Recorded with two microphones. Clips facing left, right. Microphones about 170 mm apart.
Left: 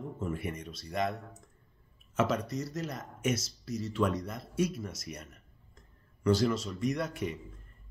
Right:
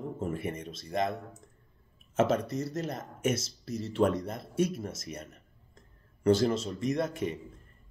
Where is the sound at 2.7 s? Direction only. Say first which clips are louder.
Right 3 dB; 50° right (ahead or behind).